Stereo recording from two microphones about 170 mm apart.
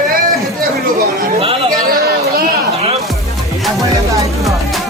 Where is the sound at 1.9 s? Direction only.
60° right (ahead or behind).